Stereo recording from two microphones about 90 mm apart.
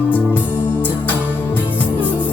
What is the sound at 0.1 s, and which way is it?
Music, 20° left (ahead or behind).